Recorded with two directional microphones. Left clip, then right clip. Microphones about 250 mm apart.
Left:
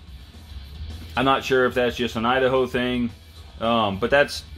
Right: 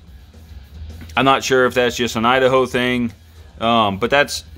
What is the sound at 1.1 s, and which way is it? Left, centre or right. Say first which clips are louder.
Speech: right 5 dB; centre.